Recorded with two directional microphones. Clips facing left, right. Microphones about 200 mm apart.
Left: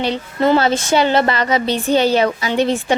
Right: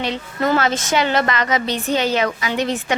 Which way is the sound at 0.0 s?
30° left (ahead or behind).